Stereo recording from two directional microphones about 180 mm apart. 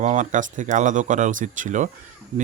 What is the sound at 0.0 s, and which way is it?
Speech, 45° right (ahead or behind).